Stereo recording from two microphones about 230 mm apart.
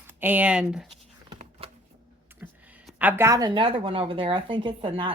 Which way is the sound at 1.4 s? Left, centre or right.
Right.